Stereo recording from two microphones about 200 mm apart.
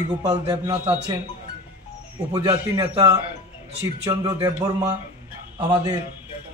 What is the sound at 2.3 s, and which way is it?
A man's voice, 20° right (ahead or behind).